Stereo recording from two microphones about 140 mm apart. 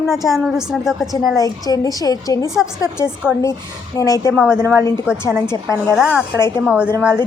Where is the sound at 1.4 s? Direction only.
25° left (ahead or behind).